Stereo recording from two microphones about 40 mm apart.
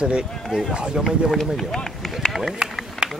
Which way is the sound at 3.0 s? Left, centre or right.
Right.